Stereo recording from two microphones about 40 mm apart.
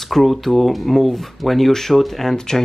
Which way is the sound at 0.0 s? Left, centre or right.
Centre.